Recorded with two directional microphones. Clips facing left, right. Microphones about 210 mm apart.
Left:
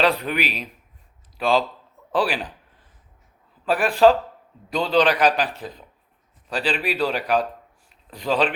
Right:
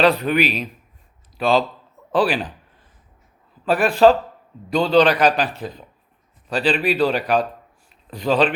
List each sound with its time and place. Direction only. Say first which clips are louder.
0.0 s speech: right 5 dB; 10° left (ahead or behind)
3.7 s speech: right 2 dB; 15° left (ahead or behind)